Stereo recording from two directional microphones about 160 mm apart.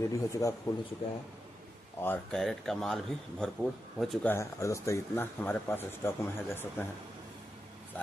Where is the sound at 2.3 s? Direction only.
Centre (ahead or behind).